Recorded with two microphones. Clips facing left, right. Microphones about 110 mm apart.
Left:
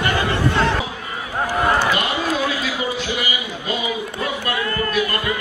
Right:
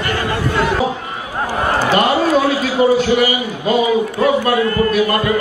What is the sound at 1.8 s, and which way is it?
A man's voice, 40° right (ahead or behind).